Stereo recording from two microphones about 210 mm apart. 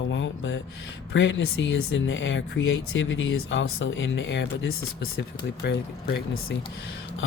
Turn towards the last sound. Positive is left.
turn(degrees=55)  # may be behind; listen again after turning